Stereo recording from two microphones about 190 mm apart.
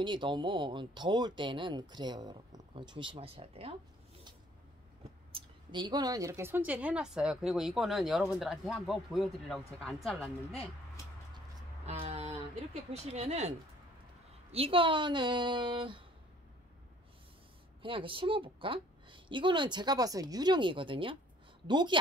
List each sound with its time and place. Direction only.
0.0 s speech: 25° right (ahead or behind)
5.3 s a woman's voice: 25° right (ahead or behind); by 10.3 s centre (ahead or behind)
11.8 s speech: 35° right (ahead or behind)
17.8 s speech: 25° right (ahead or behind)